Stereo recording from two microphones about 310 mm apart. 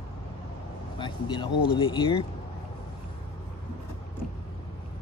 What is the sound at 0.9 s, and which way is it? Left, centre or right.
Speech, centre.